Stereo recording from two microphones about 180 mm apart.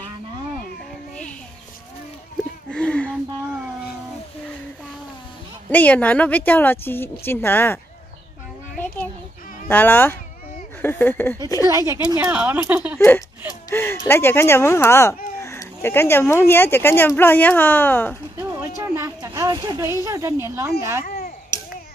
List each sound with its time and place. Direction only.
2.7 s a sound: 5° left (ahead or behind)
5.7 s a woman's voice: 10° left (ahead or behind)
9.7 s a woman's voice: 10° left (ahead or behind)
11.9 s speech: 15° right (ahead or behind)
13.7 s a woman's voice: 15° left (ahead or behind)
15.4 s a sound: 15° left (ahead or behind)
16.4 s a woman's voice: 10° left (ahead or behind)
18.8 s a woman's voice: 20° right (ahead or behind)